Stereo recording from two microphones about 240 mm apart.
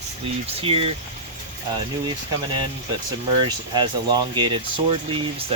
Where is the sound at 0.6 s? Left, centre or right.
Right.